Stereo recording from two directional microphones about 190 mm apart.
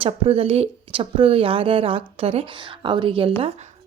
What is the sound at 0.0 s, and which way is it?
Speech, 30° right (ahead or behind).